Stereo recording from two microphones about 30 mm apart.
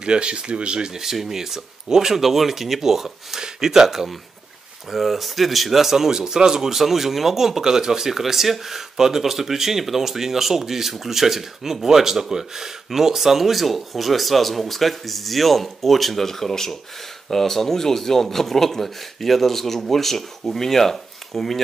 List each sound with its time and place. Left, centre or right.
0.0 s speech: right
0.7 s speech: centre
6.8 s a man's voice: centre